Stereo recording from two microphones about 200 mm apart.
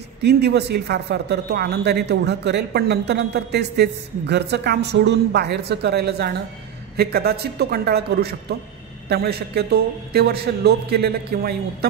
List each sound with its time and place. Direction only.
0.2 s a man's voice: 55° right (ahead or behind)